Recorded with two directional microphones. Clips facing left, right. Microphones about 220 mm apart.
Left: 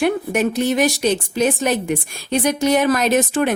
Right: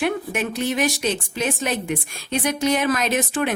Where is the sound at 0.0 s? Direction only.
40° left (ahead or behind).